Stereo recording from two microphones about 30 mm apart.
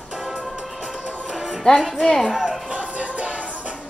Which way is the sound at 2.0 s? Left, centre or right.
Centre.